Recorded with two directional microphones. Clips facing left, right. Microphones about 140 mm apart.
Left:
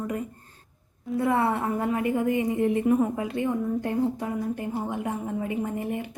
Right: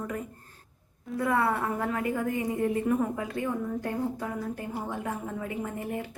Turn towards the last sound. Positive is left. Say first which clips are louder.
# left 4 dB
turn(degrees=20)  # may be behind; listen again after turning